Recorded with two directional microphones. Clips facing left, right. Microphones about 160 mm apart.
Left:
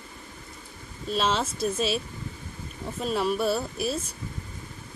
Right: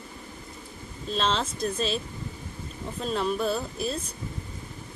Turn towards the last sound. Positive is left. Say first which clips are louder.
# left 2 dB
turn(degrees=5)  # may be behind; listen again after turning